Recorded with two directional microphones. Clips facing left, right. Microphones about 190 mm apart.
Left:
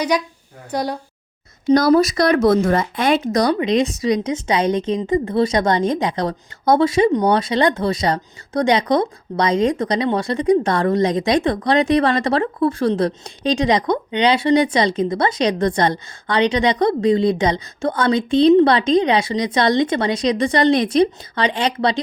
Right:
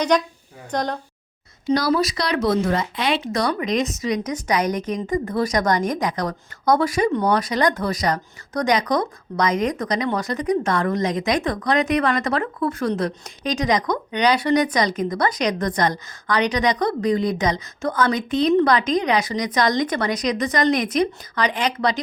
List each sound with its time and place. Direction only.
0.7 s a woman's voice: 10° left (ahead or behind)
1.7 s speech: 45° left (ahead or behind)
3.5 s a woman's voice: 30° left (ahead or behind)